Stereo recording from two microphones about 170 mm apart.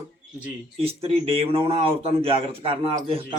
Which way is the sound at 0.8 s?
35° right (ahead or behind).